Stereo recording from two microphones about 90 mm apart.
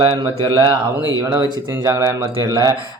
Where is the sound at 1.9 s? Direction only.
35° right (ahead or behind).